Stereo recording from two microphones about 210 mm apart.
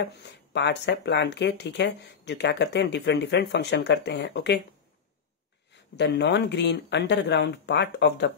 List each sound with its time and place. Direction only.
0.0 s speech: 55° left (ahead or behind)
5.9 s speech: 50° left (ahead or behind)